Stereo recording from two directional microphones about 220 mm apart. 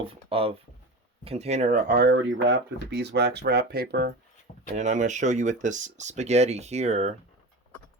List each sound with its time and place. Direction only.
0.0 s speech: 25° right (ahead or behind); by 2.1 s 40° right (ahead or behind)
2.1 s speech: 50° right (ahead or behind)
4.7 s speech: 35° right (ahead or behind)